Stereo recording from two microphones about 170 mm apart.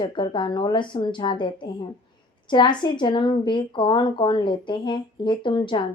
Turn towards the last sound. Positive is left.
turn(degrees=25)  # may be behind; listen again after turning